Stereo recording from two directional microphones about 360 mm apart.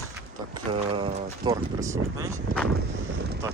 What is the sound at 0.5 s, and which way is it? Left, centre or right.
Speech, centre.